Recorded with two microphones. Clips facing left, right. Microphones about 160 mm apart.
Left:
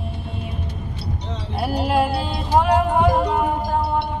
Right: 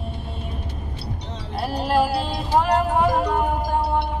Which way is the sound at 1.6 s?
5° left (ahead or behind).